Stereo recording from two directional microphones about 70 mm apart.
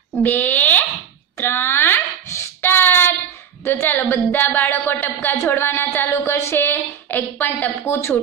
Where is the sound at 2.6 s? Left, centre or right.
Left.